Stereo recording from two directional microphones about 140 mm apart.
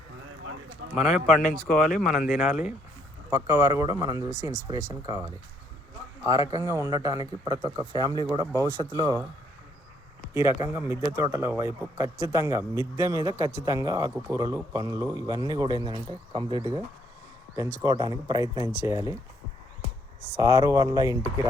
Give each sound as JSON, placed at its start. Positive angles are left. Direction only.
{"t": 0.9, "sound": "speech", "side_deg": 0}
{"t": 3.2, "sound": "speech", "side_deg": -25}
{"t": 10.6, "sound": "speech", "side_deg": -15}
{"t": 17.6, "sound": "speech", "side_deg": -25}
{"t": 20.3, "sound": "speech", "side_deg": -25}